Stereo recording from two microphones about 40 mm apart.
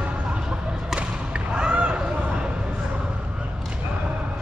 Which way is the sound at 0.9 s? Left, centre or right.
Right.